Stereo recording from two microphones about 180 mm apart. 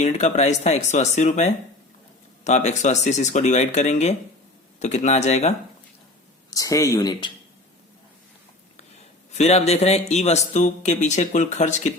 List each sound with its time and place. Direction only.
0.0 s speech: 40° left (ahead or behind)
6.5 s speech: 20° left (ahead or behind)
9.3 s speech: 40° left (ahead or behind)